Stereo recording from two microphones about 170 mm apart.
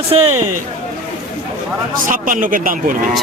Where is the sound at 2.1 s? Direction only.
50° right (ahead or behind).